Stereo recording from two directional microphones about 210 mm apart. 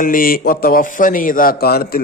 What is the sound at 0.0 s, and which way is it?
A man's voice, 40° left (ahead or behind).